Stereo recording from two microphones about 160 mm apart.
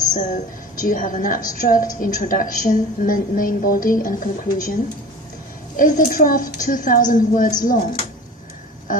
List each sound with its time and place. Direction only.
0.1 s a woman's voice: 50° left (ahead or behind)
5.7 s a woman's voice: 55° left (ahead or behind)